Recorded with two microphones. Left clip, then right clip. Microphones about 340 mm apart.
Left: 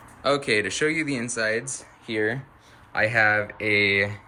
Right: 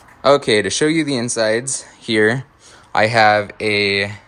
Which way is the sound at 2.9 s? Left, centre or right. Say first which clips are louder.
Right 8 dB; centre.